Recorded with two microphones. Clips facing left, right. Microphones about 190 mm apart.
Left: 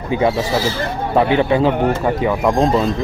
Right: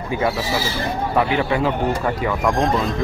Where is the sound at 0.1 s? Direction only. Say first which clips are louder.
Left 5 dB; 20° left (ahead or behind).